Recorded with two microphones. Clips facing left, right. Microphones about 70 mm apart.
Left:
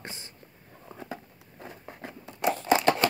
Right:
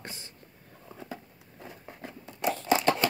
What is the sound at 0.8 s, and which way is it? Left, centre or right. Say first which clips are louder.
Patter: left 2 dB; left.